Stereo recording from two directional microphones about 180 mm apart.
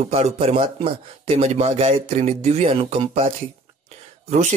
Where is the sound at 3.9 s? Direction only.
40° right (ahead or behind).